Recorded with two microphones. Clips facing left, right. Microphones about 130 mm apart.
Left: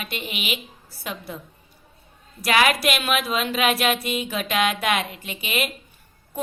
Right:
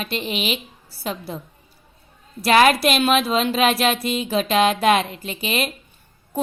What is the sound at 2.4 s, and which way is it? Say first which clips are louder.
A woman's voice: right 5 dB; 35° right (ahead or behind).